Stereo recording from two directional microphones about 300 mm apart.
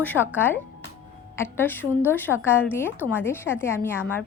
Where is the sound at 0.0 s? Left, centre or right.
Centre.